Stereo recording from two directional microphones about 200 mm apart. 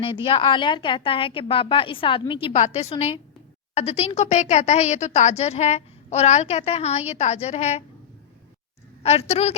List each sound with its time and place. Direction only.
0.0 s a woman's voice: 25° left (ahead or behind)
9.0 s a woman's voice: 30° left (ahead or behind)